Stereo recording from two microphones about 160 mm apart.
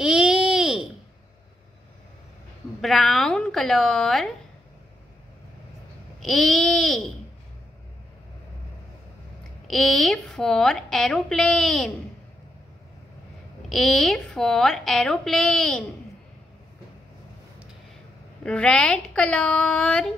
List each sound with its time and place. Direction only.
0.0 s baby cry: 5° right (ahead or behind)
2.8 s a woman's voice: centre (ahead or behind)
6.1 s a woman's voice: centre (ahead or behind)
9.7 s a woman's voice: 5° left (ahead or behind)
13.7 s a woman's voice: centre (ahead or behind)
18.4 s a woman's voice: 5° left (ahead or behind)